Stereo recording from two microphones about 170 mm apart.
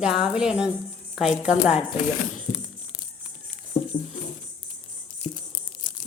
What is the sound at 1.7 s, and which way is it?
Speech, 40° left (ahead or behind).